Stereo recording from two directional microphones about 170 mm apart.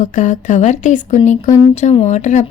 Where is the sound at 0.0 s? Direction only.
50° left (ahead or behind).